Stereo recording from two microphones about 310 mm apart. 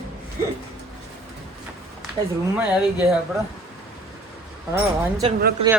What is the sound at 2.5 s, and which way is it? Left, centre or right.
Speech, centre.